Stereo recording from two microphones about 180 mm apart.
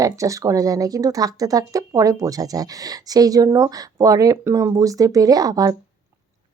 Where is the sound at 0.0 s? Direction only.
20° right (ahead or behind).